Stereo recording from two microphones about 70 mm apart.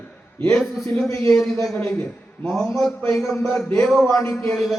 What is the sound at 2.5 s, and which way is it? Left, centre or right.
Speech, centre.